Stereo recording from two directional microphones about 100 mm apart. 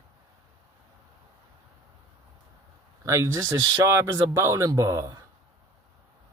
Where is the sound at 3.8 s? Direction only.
30° right (ahead or behind).